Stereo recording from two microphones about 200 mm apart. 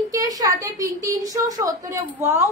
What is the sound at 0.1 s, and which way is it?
A woman's voice, 20° right (ahead or behind).